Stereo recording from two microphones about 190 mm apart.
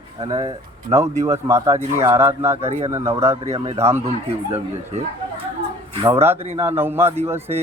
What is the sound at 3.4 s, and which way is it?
Speech, 35° right (ahead or behind).